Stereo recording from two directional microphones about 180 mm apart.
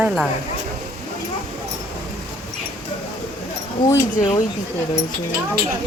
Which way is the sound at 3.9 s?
20° left (ahead or behind).